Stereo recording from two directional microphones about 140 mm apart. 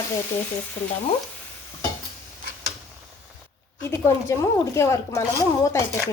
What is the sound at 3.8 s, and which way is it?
Speech, 20° left (ahead or behind).